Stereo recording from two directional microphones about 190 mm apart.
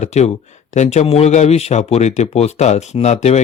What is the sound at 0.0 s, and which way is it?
Speech, 35° left (ahead or behind).